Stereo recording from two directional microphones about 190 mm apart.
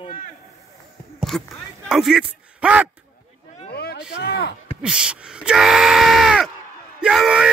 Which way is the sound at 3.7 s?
55° left (ahead or behind).